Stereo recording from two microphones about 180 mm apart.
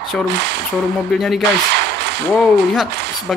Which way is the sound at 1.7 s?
65° right (ahead or behind).